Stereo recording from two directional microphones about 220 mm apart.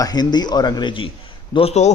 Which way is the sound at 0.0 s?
20° left (ahead or behind).